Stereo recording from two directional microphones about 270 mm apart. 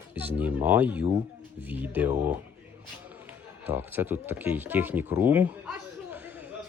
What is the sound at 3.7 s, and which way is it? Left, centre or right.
Speech, centre.